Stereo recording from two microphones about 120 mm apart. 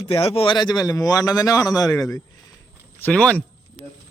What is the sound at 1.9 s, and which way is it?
Speech, 20° left (ahead or behind).